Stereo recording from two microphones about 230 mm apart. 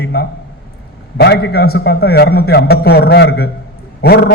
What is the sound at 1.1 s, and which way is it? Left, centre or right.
A man's voice, left.